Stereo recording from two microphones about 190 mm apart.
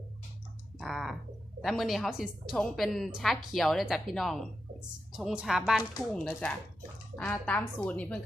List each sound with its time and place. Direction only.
0.8 s a woman's voice: centre (ahead or behind)